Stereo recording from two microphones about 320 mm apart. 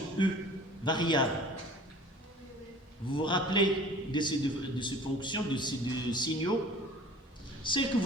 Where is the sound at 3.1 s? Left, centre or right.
Centre.